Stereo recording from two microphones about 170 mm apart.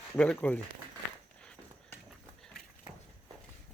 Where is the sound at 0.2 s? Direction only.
10° left (ahead or behind).